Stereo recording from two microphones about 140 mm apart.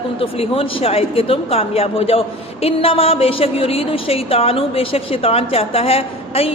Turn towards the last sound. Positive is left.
turn(degrees=45)  # may be behind; listen again after turning